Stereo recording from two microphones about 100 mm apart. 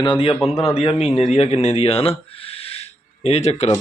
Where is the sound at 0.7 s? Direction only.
90° left.